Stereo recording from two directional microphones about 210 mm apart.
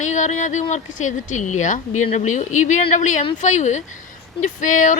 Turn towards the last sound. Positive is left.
turn(degrees=35)  # may be behind; listen again after turning